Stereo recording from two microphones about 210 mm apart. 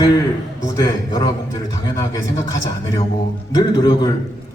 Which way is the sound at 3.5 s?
15° left (ahead or behind).